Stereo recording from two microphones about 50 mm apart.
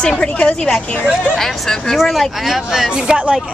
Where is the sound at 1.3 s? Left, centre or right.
Centre.